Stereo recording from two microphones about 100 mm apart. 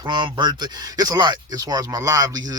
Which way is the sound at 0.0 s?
50° right (ahead or behind).